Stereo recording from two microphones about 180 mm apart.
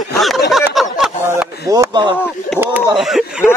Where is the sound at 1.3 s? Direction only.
15° right (ahead or behind).